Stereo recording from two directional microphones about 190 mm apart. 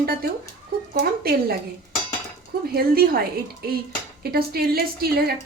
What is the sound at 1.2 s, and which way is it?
Speech, 55° right (ahead or behind).